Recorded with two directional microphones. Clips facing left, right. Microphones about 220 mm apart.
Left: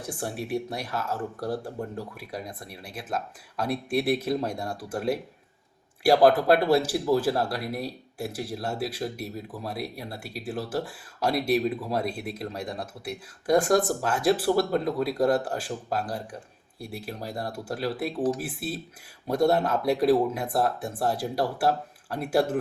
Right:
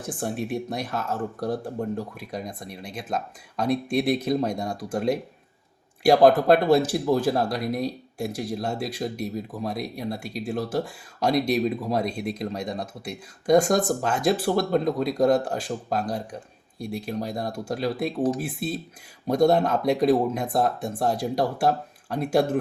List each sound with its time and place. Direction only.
0.3 s speech: 10° left (ahead or behind)